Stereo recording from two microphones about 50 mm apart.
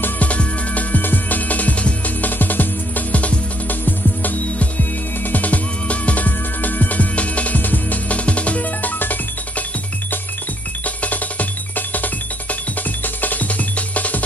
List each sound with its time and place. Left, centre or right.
0.0 s music: left
11.0 s music: left